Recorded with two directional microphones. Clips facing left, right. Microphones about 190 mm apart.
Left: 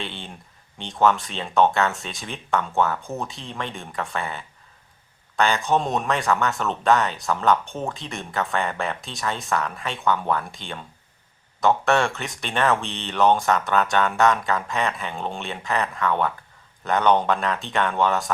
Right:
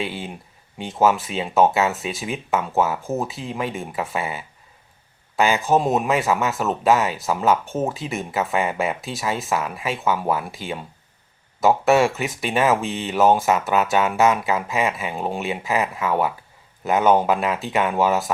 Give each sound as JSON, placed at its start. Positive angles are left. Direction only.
{"t": 0.0, "sound": "speech", "side_deg": -5}